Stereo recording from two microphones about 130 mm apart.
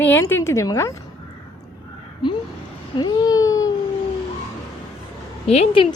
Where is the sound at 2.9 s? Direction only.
30° left (ahead or behind).